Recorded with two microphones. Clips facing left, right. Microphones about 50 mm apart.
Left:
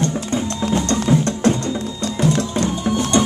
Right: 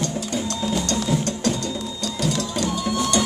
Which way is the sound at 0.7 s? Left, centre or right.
Left.